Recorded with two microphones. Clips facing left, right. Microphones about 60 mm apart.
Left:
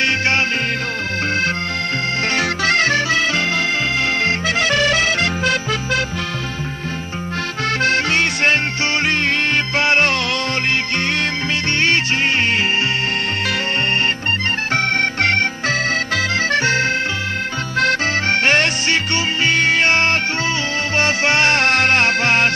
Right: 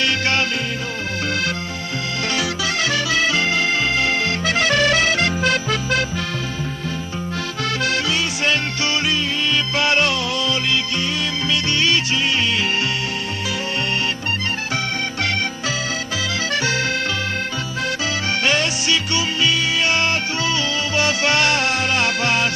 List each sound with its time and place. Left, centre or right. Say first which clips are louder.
2.3 s music: left 6 dB; left
7.8 s music: left 5 dB; left
9.8 s music: left 2 dB; left
10.1 s music: left 1 dB; left
11.8 s music: left 5 dB; left
14.7 s music: left 6 dB; left
17.7 s music: left 8 dB; left
21.5 s music: left 5 dB; left